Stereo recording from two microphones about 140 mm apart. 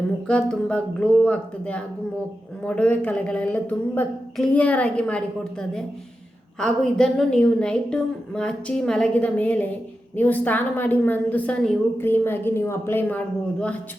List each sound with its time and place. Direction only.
0.3 s a woman's voice: 10° left (ahead or behind)